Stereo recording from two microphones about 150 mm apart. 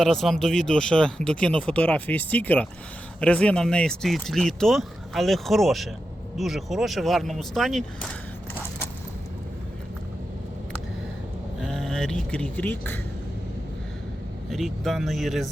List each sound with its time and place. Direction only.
0.0 s speech: centre (ahead or behind)
11.6 s speech: 5° left (ahead or behind)
14.5 s speech: centre (ahead or behind)